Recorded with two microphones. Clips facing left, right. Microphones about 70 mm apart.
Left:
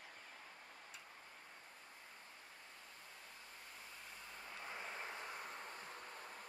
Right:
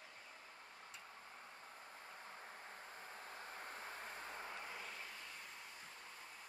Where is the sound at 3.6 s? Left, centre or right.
Right.